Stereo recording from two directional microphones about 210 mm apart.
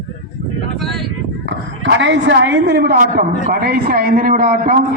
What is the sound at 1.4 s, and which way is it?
A woman's voice, 60° right (ahead or behind).